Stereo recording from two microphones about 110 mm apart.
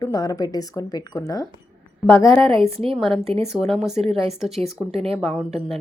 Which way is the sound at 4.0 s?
60° right (ahead or behind).